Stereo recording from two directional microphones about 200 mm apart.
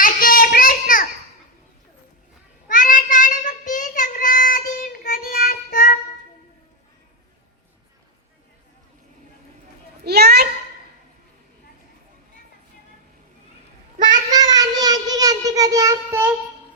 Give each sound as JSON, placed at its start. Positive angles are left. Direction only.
{"t": 0.0, "sound": "child singing", "side_deg": 45}
{"t": 2.6, "sound": "child singing", "side_deg": 40}
{"t": 10.0, "sound": "a sound", "side_deg": -55}
{"t": 14.3, "sound": "child singing", "side_deg": -20}